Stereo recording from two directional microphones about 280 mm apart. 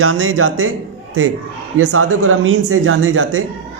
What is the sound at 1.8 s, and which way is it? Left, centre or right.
Speech, right.